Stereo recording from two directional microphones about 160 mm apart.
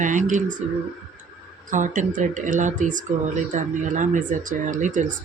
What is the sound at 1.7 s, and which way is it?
Speech, 50° right (ahead or behind).